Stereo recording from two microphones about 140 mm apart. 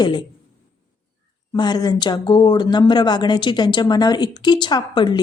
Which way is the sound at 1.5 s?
30° left (ahead or behind).